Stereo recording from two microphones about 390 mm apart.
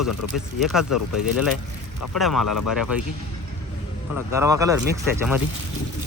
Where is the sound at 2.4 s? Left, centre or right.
Left.